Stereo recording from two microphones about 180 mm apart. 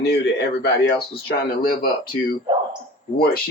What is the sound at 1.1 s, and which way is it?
Speech, 55° left (ahead or behind).